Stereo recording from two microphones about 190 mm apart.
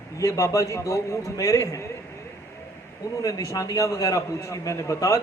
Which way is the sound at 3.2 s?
20° left (ahead or behind).